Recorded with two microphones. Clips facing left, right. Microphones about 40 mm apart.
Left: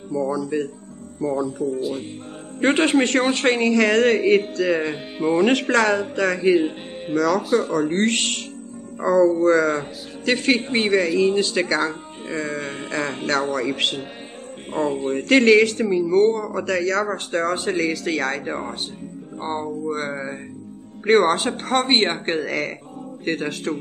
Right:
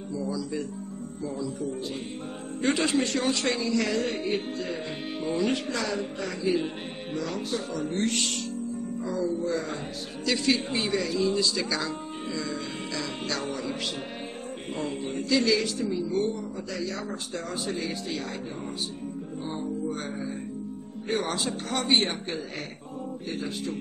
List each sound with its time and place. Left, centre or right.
0.1 s speech: left
1.8 s music: centre
2.6 s speech: left
5.4 s a man's voice: left
7.4 s speech: centre
7.7 s speech: left
9.0 s speech: left
10.2 s speech: left
14.7 s speech: left
15.1 s a man's voice: left
18.6 s speech: left
22.4 s speech: left
23.2 s a man's voice: left